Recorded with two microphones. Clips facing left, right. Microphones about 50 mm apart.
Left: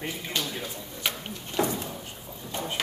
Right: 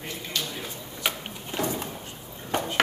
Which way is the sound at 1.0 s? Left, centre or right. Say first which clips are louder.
Right 2 dB; centre.